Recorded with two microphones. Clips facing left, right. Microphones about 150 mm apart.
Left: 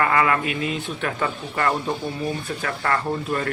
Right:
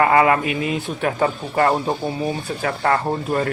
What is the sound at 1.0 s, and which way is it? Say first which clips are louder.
Speech: right 5 dB; 35° right (ahead or behind).